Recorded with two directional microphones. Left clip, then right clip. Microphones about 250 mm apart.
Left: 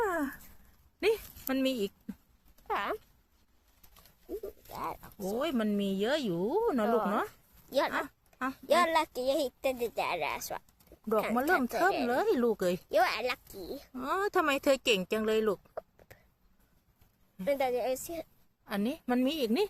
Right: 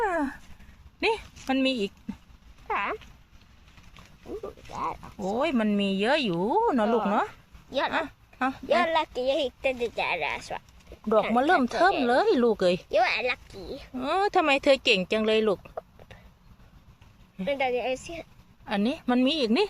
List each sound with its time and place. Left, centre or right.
0.0 s a sound: centre
2.6 s a sound: left
4.7 s a sound: left
5.4 s speech: centre
6.8 s speech: left
7.1 s speech: centre
7.7 s speech: left
7.9 s a sound: centre
8.6 s speech: left
11.3 s speech: centre
12.9 s speech: left
13.9 s speech: centre
17.4 s a woman's voice: left
18.6 s speech: centre